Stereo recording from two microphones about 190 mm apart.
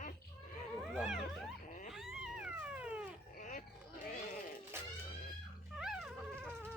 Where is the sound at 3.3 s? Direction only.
45° left (ahead or behind).